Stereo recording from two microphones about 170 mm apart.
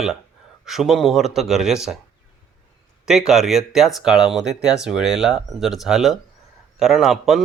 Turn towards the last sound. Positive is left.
turn(degrees=0)  # may be behind; listen again after turning